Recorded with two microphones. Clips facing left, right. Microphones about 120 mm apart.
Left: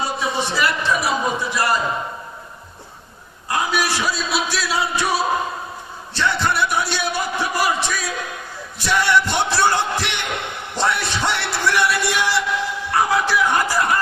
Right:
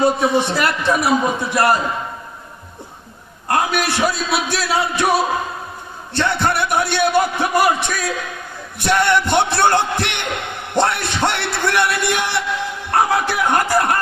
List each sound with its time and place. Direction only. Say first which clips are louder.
0.0 s speech: right 7 dB; 55° right (ahead or behind)
3.5 s speech: right 3 dB; 55° right (ahead or behind)